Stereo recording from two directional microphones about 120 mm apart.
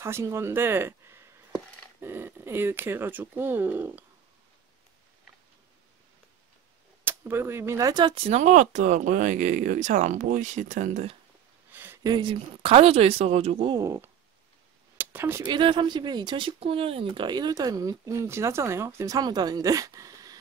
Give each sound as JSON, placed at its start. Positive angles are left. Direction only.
{"t": 0.0, "sound": "speech", "side_deg": -20}
{"t": 7.1, "sound": "speech", "side_deg": -20}
{"t": 8.1, "sound": "speech", "side_deg": -60}
{"t": 11.7, "sound": "a sound", "side_deg": -20}
{"t": 12.0, "sound": "speech", "side_deg": -40}
{"t": 13.7, "sound": "speech", "side_deg": -30}
{"t": 15.0, "sound": "a sound", "side_deg": -15}
{"t": 15.4, "sound": "speech", "side_deg": -40}